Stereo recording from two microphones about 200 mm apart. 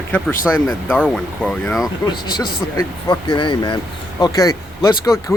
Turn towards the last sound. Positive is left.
turn(degrees=15)  # may be behind; listen again after turning